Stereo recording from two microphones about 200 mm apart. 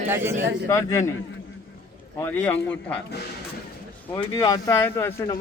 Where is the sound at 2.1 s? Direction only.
10° left (ahead or behind).